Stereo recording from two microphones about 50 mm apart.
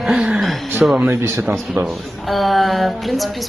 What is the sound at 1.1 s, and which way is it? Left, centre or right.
Speech, right.